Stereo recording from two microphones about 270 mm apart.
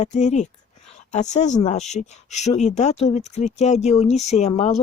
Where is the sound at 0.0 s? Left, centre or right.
Left.